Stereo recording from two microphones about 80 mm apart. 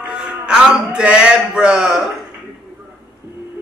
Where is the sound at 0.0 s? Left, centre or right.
Centre.